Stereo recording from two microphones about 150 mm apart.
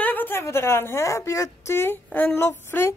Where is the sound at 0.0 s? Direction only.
10° left (ahead or behind).